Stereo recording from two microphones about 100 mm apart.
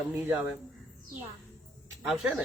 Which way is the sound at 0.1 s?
20° right (ahead or behind).